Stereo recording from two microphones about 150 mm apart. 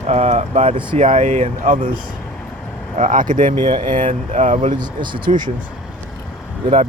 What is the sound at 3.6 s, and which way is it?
Speech, 30° right (ahead or behind).